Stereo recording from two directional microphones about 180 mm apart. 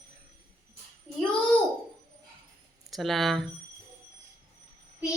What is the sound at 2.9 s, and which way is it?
Speech, centre (ahead or behind).